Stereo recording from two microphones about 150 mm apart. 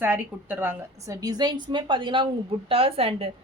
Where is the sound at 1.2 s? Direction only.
25° right (ahead or behind).